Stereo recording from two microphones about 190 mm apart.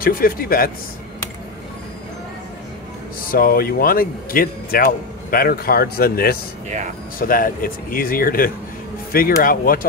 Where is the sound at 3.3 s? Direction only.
50° left (ahead or behind).